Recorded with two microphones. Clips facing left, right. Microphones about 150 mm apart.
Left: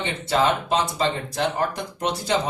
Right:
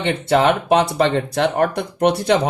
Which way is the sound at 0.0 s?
65° right (ahead or behind).